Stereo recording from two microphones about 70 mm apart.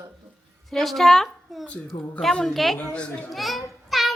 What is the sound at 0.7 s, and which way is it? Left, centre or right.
A woman's voice, centre.